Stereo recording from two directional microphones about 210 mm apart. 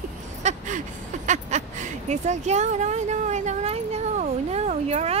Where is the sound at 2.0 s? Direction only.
30° right (ahead or behind).